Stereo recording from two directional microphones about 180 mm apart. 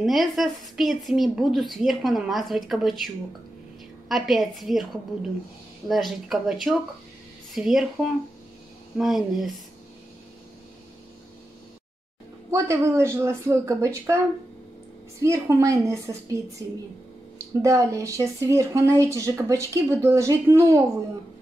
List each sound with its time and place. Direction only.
0.0 s a woman's voice: centre (ahead or behind)
4.1 s a woman's voice: centre (ahead or behind)
12.4 s speech: 15° right (ahead or behind)
15.2 s speech: 15° right (ahead or behind)
17.6 s speech: 15° right (ahead or behind)